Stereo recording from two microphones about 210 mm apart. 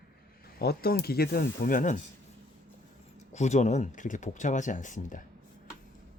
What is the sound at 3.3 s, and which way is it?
Speech, 35° left (ahead or behind).